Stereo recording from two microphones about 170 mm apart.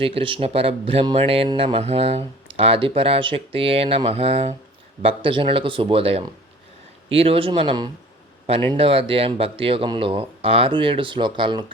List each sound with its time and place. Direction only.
0.0 s speech: 30° right (ahead or behind)